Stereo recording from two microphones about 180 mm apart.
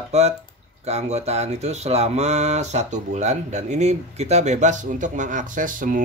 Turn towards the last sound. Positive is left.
turn(degrees=-50)  # may be behind; listen again after turning